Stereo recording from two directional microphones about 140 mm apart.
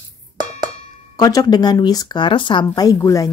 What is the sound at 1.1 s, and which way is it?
Speech, 25° left (ahead or behind).